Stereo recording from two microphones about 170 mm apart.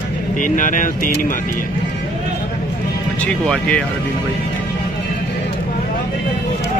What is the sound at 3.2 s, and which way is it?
Speech, 5° left (ahead or behind).